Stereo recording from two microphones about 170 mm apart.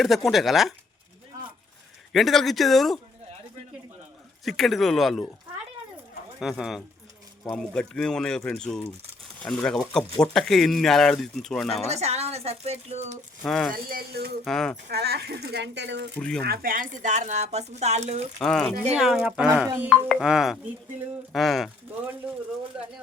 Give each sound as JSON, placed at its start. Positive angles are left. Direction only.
{"t": 0.0, "sound": "speech", "side_deg": 0}
{"t": 2.1, "sound": "speech", "side_deg": 0}
{"t": 4.4, "sound": "speech", "side_deg": 0}
{"t": 6.4, "sound": "speech", "side_deg": 0}
{"t": 11.9, "sound": "speech", "side_deg": -40}
{"t": 13.4, "sound": "speech", "side_deg": 5}
{"t": 13.7, "sound": "speech", "side_deg": -60}
{"t": 14.4, "sound": "speech", "side_deg": 5}
{"t": 14.8, "sound": "speech", "side_deg": -70}
{"t": 16.1, "sound": "speech", "side_deg": 5}
{"t": 16.5, "sound": "speech", "side_deg": -55}
{"t": 18.3, "sound": "speech", "side_deg": 5}
{"t": 20.1, "sound": "speech", "side_deg": 0}